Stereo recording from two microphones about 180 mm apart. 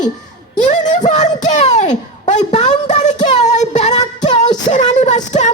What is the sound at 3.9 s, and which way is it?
Music, 20° left (ahead or behind).